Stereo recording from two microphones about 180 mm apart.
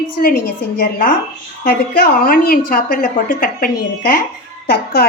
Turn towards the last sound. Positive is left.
turn(degrees=60)  # may be behind; listen again after turning